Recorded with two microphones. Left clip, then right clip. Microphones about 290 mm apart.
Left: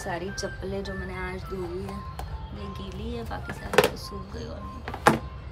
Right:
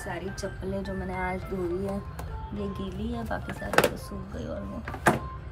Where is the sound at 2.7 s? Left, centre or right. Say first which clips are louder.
Right 1 dB; centre.